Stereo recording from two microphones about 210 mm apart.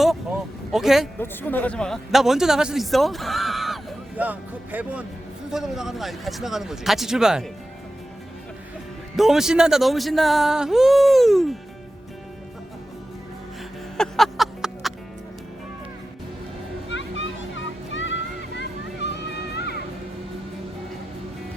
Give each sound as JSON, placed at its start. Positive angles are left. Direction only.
{"t": 0.0, "sound": "speech", "side_deg": 0}
{"t": 1.2, "sound": "speech", "side_deg": 10}
{"t": 9.1, "sound": "speech", "side_deg": 0}
{"t": 13.9, "sound": "music", "side_deg": 0}
{"t": 16.9, "sound": "music", "side_deg": 60}